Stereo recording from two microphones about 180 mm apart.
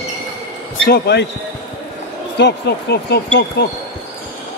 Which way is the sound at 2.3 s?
70° left (ahead or behind).